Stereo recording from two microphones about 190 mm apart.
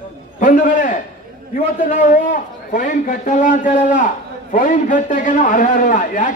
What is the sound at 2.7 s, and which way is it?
A man's voice, 45° left (ahead or behind).